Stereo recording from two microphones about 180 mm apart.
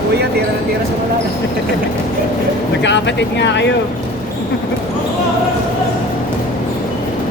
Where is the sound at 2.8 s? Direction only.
80° left.